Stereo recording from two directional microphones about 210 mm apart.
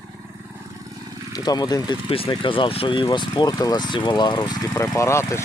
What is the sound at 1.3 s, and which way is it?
Speech, 20° left (ahead or behind).